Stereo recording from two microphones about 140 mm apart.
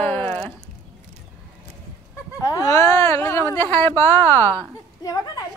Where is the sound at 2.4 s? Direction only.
25° left (ahead or behind).